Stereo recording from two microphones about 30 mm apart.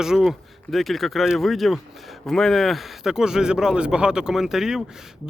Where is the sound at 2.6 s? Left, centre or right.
Centre.